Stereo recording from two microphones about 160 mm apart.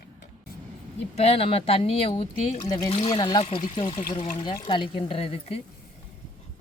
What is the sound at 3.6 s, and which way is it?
Speech, 40° left (ahead or behind).